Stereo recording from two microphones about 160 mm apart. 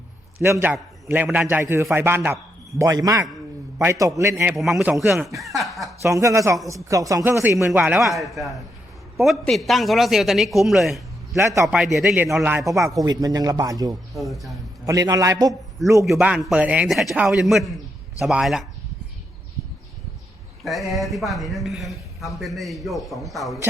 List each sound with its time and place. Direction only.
0.4 s speech: 15° right (ahead or behind)
4.5 s speech: centre (ahead or behind)
6.0 s a man's voice: 20° right (ahead or behind); by 11.3 s centre (ahead or behind)
11.3 s speech: 15° right (ahead or behind)
11.6 s a man's voice: centre (ahead or behind)
12.5 s speech: 20° right (ahead or behind)
14.1 s a man's voice: centre (ahead or behind)
14.8 s speech: 20° right (ahead or behind)
16.0 s a man's voice: 5° right (ahead or behind)
20.7 s a man's voice: centre (ahead or behind)